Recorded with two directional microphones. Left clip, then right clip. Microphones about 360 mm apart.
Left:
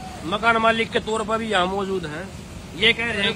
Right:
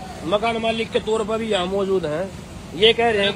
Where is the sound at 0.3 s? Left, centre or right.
Centre.